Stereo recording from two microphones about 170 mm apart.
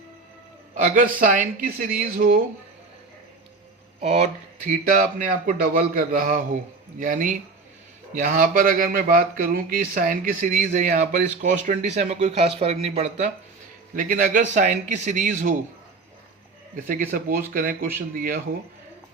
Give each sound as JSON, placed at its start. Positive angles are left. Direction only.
{"t": 0.7, "sound": "speech", "side_deg": -50}
{"t": 4.6, "sound": "speech", "side_deg": -50}
{"t": 13.9, "sound": "speech", "side_deg": -50}
{"t": 16.7, "sound": "speech", "side_deg": -50}